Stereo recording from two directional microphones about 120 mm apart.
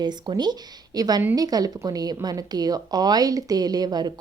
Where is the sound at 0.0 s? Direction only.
35° right (ahead or behind).